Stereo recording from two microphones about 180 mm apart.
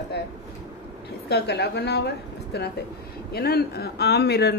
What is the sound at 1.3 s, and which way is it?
A woman's voice, 65° left (ahead or behind).